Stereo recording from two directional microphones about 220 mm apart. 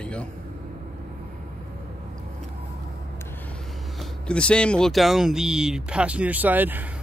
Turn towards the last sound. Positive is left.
turn(degrees=-10)  # may be behind; listen again after turning